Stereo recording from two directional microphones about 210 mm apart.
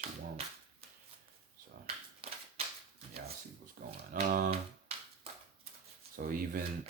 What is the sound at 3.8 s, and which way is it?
Speech, 50° right (ahead or behind).